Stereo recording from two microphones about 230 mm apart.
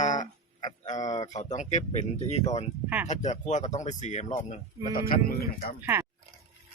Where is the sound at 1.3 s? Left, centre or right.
Left.